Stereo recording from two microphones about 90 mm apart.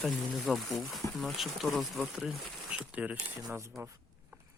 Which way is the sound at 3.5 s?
35° right (ahead or behind).